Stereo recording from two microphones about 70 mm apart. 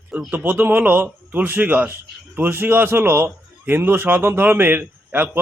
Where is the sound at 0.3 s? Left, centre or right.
Right.